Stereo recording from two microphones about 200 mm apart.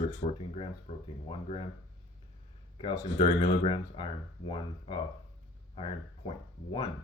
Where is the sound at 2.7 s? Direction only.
25° left (ahead or behind).